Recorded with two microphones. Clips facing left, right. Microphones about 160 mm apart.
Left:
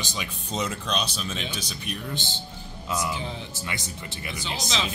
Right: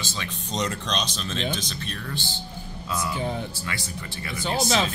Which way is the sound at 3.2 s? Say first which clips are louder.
Right 6 dB; 50° right (ahead or behind).